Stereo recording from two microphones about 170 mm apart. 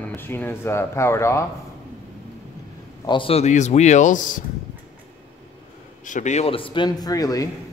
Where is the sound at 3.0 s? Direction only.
30° left (ahead or behind); by 4.4 s 50° left (ahead or behind).